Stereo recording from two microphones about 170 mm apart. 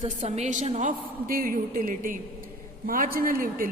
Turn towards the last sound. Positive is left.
turn(degrees=-55)  # may be behind; listen again after turning